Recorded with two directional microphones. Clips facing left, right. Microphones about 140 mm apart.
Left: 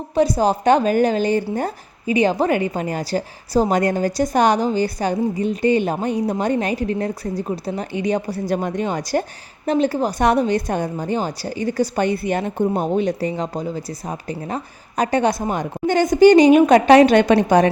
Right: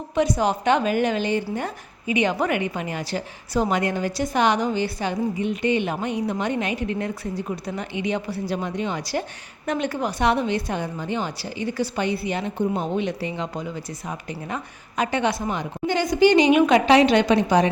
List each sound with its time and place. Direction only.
0.1 s a woman's voice: 35° left (ahead or behind)
9.6 s a woman's voice: 35° left (ahead or behind); by 17.7 s 50° left (ahead or behind)